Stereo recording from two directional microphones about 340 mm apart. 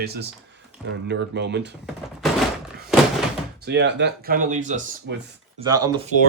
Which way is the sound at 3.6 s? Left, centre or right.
Right.